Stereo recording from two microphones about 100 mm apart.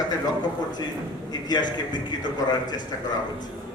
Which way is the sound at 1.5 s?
45° left (ahead or behind).